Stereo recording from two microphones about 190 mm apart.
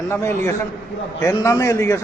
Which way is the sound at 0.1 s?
15° left (ahead or behind).